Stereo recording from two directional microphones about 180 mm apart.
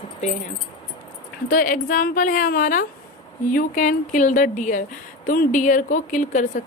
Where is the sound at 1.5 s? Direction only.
50° left (ahead or behind).